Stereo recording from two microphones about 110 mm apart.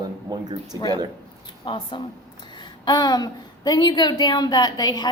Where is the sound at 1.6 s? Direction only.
50° left (ahead or behind).